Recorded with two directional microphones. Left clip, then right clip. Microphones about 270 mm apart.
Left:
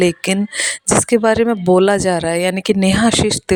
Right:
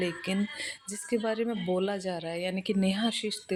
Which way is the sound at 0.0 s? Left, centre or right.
Left.